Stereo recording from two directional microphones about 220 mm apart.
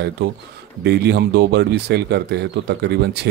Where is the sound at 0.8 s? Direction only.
50° right (ahead or behind).